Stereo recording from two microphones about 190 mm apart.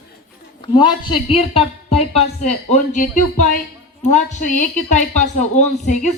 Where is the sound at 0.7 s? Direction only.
25° left (ahead or behind).